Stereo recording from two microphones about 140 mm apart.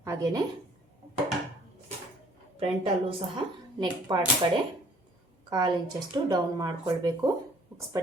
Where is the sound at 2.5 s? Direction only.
40° right (ahead or behind).